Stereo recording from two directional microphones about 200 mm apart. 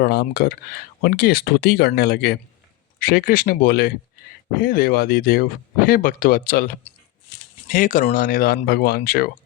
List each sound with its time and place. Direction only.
0.0 s speech: 50° left (ahead or behind)
7.7 s speech: 40° left (ahead or behind)